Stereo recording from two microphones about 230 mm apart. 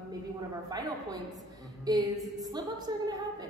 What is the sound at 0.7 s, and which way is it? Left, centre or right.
A woman's voice, centre.